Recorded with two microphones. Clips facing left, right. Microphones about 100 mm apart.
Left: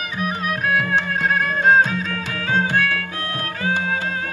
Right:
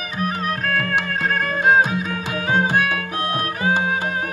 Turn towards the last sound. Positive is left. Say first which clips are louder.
# right 3 dB
turn(degrees=-20)  # may be behind; listen again after turning